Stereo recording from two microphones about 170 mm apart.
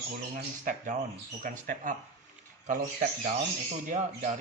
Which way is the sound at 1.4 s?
50° right (ahead or behind).